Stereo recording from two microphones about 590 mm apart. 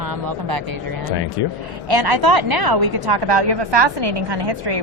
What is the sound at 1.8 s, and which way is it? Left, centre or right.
A woman's voice, right.